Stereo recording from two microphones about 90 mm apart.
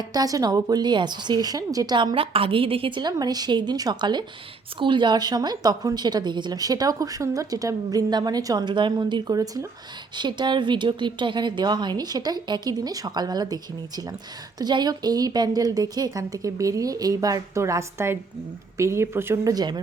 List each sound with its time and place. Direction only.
0.0 s a woman's voice: 45° right (ahead or behind)
2.1 s a woman's voice: 90° right
3.0 s a woman's voice: 50° right (ahead or behind)
8.7 s a woman's voice: 60° right (ahead or behind); by 9.6 s 45° right (ahead or behind)
10.2 s a woman's voice: 55° right (ahead or behind); by 19.4 s 30° right (ahead or behind)
19.5 s a woman's voice: 50° right (ahead or behind)